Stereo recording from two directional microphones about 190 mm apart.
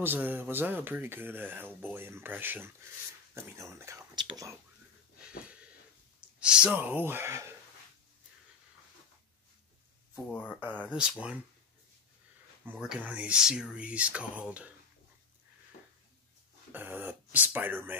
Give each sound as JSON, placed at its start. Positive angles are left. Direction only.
{"t": 0.0, "sound": "speech", "side_deg": -10}
{"t": 6.4, "sound": "speech", "side_deg": -5}
{"t": 10.1, "sound": "speech", "side_deg": 10}
{"t": 10.9, "sound": "speech", "side_deg": -5}
{"t": 12.7, "sound": "speech", "side_deg": -5}
{"t": 16.7, "sound": "speech", "side_deg": -10}